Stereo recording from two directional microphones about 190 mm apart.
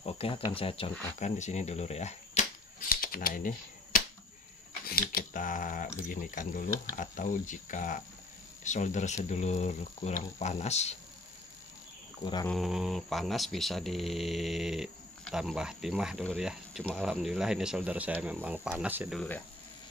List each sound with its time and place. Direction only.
0.0 s speech: 30° left (ahead or behind)
2.9 s speech: 50° left (ahead or behind)
12.4 s speech: centre (ahead or behind)
19.1 s speech: 10° left (ahead or behind)